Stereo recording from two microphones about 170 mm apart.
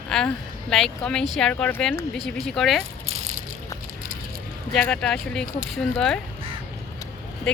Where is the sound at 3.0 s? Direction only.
40° right (ahead or behind).